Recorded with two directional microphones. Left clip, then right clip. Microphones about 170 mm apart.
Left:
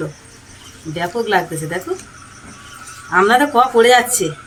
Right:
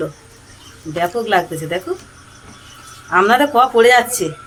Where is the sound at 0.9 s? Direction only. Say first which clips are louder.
Right 1 dB; 20° right (ahead or behind).